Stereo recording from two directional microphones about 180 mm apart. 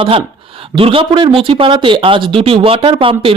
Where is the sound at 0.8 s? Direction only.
30° right (ahead or behind).